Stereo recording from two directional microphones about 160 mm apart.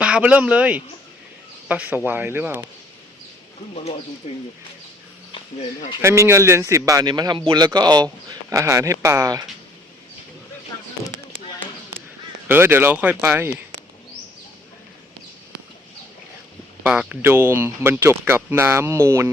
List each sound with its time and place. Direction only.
0.0 s speech: 5° right (ahead or behind)
4.2 s speech: 35° left (ahead or behind)
6.0 s a man's voice: 15° right (ahead or behind)
11.0 s chop: 15° right (ahead or behind)
12.5 s speech: 15° right (ahead or behind)
16.8 s speech: 10° right (ahead or behind)